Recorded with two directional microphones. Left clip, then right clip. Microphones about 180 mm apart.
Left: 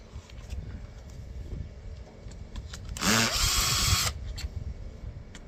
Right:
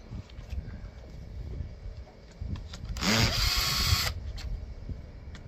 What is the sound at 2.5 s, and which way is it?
Drill, 15° left (ahead or behind).